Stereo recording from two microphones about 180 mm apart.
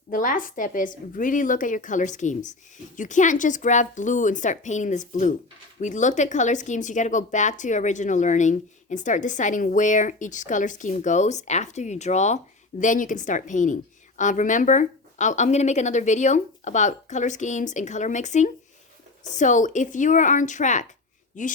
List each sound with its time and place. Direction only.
0.1 s speech: 50° left (ahead or behind)